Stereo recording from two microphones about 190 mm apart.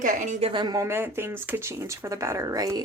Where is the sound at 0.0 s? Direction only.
40° right (ahead or behind).